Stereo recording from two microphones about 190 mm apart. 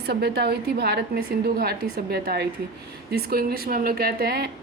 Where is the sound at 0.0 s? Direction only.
60° right (ahead or behind).